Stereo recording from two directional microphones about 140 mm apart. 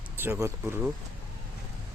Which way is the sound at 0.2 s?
15° right (ahead or behind).